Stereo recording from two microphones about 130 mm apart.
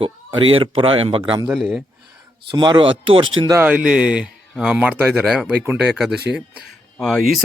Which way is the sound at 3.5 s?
15° right (ahead or behind).